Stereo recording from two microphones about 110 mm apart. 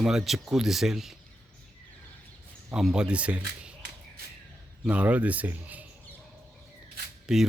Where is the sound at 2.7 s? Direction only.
5° right (ahead or behind).